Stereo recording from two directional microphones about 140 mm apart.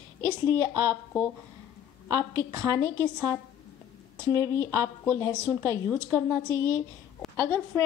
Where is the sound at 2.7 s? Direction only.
20° left (ahead or behind).